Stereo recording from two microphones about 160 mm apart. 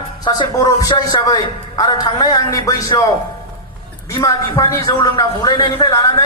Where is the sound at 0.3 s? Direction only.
25° left (ahead or behind).